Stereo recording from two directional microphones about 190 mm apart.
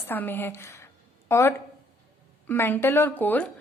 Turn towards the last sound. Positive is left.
turn(degrees=5)  # may be behind; listen again after turning